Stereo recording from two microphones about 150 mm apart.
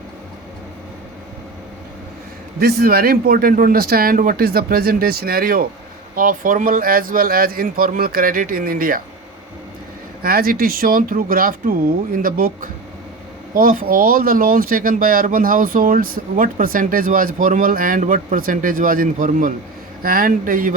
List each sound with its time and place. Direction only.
2.6 s speech: 90° right; by 9.0 s 70° right (ahead or behind)
10.2 s speech: 85° right; by 12.5 s 70° right (ahead or behind)
13.5 s speech: 70° right (ahead or behind)